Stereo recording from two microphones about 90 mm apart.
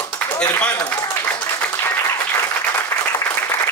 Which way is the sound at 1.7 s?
25° left (ahead or behind).